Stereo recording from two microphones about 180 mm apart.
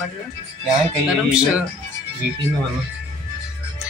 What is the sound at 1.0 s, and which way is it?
Speech, 5° right (ahead or behind).